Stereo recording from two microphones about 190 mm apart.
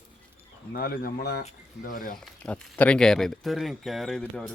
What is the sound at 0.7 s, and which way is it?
Speech, 50° left (ahead or behind).